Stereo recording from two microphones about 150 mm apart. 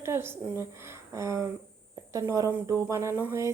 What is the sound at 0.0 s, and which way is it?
Speech, 15° right (ahead or behind).